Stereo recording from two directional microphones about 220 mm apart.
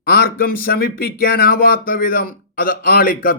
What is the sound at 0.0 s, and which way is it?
A man's voice, 45° left (ahead or behind).